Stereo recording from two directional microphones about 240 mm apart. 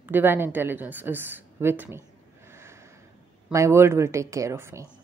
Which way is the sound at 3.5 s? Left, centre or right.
Centre.